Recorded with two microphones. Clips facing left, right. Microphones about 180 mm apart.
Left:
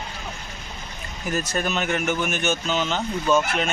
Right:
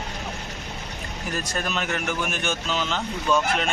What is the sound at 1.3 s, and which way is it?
Speech, 5° left (ahead or behind).